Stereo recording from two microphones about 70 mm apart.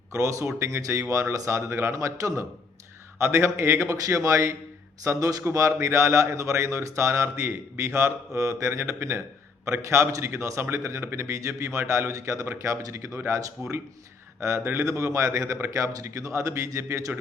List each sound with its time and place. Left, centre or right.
0.1 s speech: right
14.4 s speech: right